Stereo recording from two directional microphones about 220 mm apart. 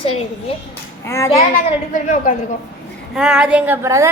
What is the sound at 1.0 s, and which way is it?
Speech, 10° left (ahead or behind).